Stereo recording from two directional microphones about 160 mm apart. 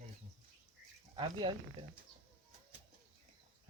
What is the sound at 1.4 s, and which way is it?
Speech, 35° right (ahead or behind).